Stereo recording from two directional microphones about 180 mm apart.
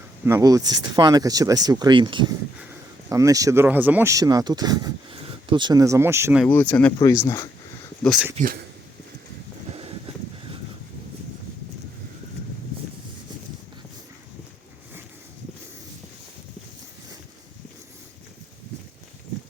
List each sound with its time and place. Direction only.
0.3 s speech: 15° right (ahead or behind)
6.4 s speech: 10° left (ahead or behind)
8.0 s speech: centre (ahead or behind)
9.6 s a sound: 30° right (ahead or behind)